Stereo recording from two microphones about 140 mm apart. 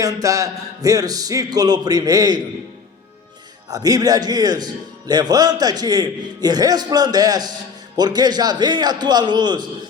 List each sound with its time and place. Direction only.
0.0 s a man's voice: 25° right (ahead or behind)
3.7 s a man's voice: 25° right (ahead or behind)